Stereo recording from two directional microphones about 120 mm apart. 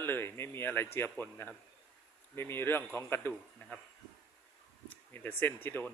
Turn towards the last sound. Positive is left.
turn(degrees=15)  # may be behind; listen again after turning